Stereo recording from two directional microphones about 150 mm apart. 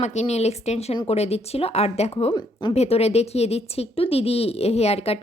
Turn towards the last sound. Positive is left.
turn(degrees=40)  # may be behind; listen again after turning